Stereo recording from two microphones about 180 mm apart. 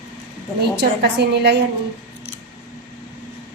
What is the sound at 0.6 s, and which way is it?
Speech, 65° right (ahead or behind).